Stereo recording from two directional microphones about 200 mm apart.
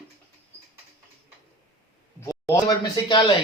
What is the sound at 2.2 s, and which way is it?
Speech, 15° left (ahead or behind).